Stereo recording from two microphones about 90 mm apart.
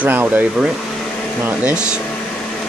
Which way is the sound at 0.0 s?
20° right (ahead or behind).